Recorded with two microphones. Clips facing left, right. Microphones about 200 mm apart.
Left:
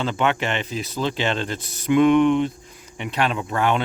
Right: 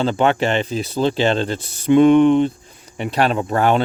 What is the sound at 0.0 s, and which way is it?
Speech, 35° right (ahead or behind).